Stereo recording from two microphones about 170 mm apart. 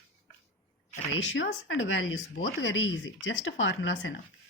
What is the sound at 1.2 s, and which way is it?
Speech, 90° left.